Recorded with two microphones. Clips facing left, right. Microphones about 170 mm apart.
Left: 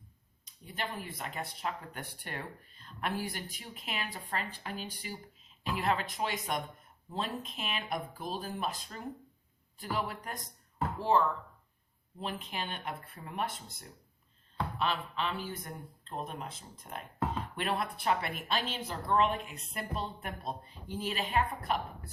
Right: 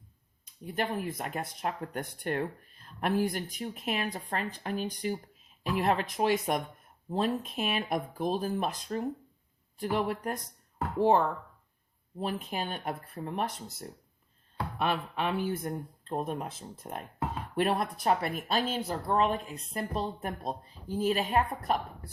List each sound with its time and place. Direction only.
0.4 s speech: 50° right (ahead or behind)
14.8 s speech: 50° right (ahead or behind)